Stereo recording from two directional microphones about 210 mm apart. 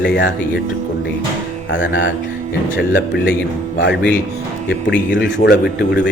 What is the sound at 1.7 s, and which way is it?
Speech, 60° left (ahead or behind).